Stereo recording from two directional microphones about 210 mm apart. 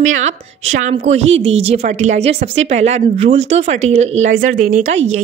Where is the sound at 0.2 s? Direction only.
35° right (ahead or behind).